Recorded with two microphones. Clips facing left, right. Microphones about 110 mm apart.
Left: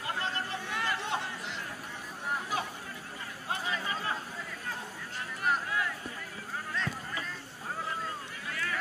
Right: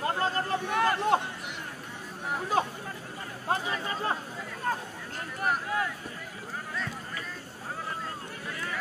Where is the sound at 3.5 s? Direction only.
40° right (ahead or behind).